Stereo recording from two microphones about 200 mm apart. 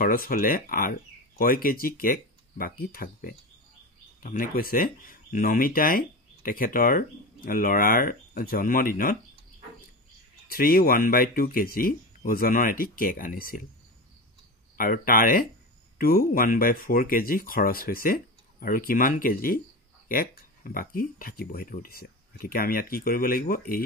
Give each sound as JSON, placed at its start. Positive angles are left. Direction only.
{"t": 0.0, "sound": "speech", "side_deg": 45}
{"t": 10.5, "sound": "speech", "side_deg": 45}
{"t": 14.8, "sound": "speech", "side_deg": 45}